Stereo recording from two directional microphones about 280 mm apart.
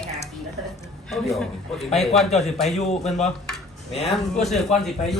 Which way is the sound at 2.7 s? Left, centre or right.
Left.